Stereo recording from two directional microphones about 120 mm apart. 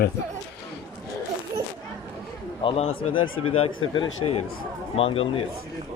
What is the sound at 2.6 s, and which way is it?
Speech, 50° left (ahead or behind).